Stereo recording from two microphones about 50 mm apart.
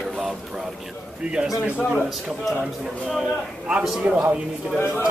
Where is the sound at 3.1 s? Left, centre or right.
Centre.